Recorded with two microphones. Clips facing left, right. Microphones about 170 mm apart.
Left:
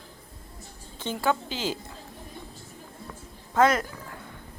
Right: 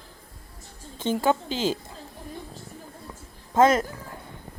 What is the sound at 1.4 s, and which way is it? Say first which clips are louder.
Speech: right 5 dB; 15° left (ahead or behind).